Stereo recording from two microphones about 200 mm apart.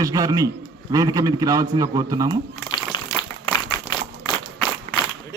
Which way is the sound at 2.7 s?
20° left (ahead or behind).